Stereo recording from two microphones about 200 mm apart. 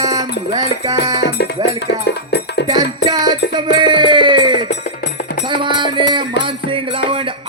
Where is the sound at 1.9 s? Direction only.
55° left (ahead or behind).